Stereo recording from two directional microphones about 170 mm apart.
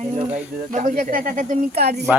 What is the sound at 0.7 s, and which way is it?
Speech, 50° right (ahead or behind).